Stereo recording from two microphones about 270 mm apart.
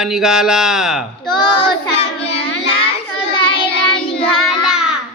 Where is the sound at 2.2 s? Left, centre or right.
Left.